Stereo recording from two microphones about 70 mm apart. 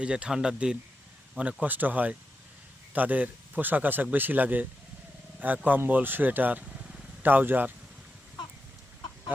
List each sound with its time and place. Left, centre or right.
0.0 s speech: centre
1.6 s speech: right